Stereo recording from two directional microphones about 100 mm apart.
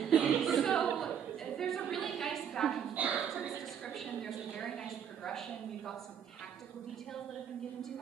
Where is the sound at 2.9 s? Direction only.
15° right (ahead or behind).